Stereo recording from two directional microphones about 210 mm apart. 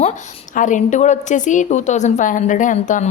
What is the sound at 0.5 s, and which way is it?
A woman's voice, 35° left (ahead or behind).